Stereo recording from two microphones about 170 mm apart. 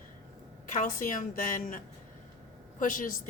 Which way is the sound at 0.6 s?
50° left (ahead or behind).